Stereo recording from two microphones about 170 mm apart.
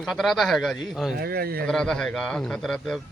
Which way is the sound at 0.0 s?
Centre (ahead or behind).